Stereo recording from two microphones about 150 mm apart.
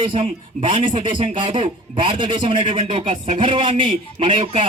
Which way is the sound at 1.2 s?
35° right (ahead or behind).